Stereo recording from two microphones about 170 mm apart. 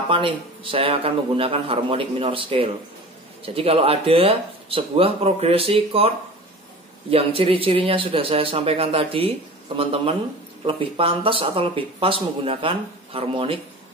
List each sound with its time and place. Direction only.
0.1 s speech: 30° right (ahead or behind)